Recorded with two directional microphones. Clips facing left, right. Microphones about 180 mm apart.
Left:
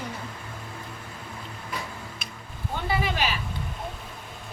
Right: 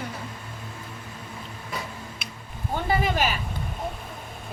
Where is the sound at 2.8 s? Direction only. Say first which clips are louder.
Right 3 dB; 45° right (ahead or behind).